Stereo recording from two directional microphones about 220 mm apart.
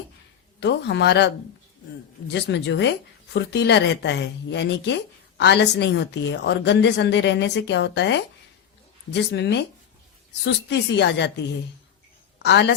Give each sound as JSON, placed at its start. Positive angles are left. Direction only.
{"t": 0.6, "sound": "a woman's voice", "side_deg": 50}